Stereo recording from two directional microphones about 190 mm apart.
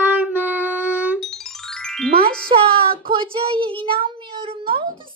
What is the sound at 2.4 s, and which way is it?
Speech, 30° right (ahead or behind).